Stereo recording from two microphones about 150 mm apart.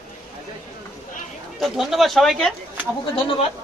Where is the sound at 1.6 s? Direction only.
Centre (ahead or behind).